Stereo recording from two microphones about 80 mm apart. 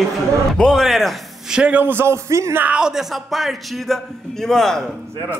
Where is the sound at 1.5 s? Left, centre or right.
Centre; by 2.6 s right.